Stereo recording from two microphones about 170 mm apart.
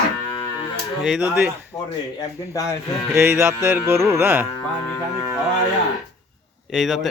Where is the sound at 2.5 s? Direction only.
20° left (ahead or behind).